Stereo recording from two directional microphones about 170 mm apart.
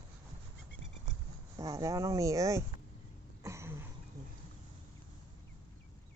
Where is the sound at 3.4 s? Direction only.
15° right (ahead or behind).